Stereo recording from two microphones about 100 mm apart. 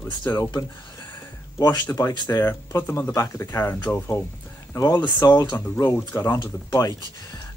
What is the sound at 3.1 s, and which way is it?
Speech, 30° left (ahead or behind).